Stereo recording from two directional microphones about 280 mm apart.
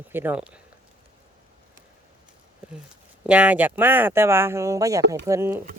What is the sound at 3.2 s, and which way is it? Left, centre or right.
Speech, centre.